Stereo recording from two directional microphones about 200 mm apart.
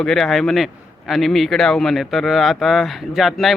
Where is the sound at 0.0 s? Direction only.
5° left (ahead or behind).